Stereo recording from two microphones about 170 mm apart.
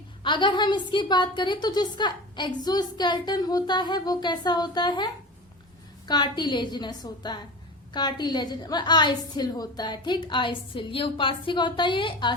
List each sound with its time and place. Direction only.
0.2 s a woman's voice: 30° left (ahead or behind)